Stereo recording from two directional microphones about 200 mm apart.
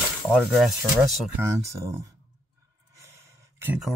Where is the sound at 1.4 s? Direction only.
15° right (ahead or behind).